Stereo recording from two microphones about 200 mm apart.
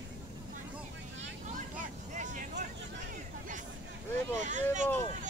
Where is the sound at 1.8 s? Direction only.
40° right (ahead or behind).